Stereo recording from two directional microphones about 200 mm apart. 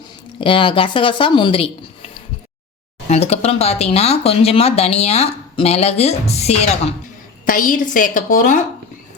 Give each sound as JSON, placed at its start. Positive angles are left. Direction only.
{"t": 0.3, "sound": "a woman's voice", "side_deg": 25}
{"t": 7.4, "sound": "speech", "side_deg": 45}